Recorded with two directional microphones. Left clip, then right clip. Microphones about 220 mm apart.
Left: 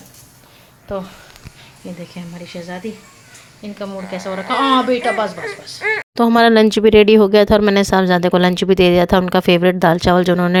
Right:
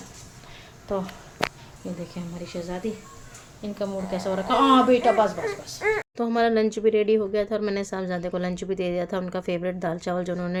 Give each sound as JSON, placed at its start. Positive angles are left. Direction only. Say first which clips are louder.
{"t": 2.1, "sound": "a woman's voice", "louder": "left 3 dB", "side_deg": 10}
{"t": 6.1, "sound": "speech", "louder": "left 14 dB", "side_deg": 45}